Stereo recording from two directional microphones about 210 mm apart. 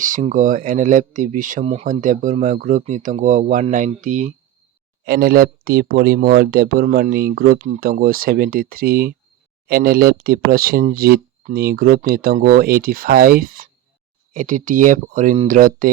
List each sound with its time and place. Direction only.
0.0 s speech: 35° right (ahead or behind)